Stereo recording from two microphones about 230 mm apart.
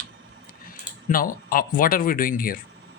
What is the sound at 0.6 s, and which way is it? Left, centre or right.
Speech, left.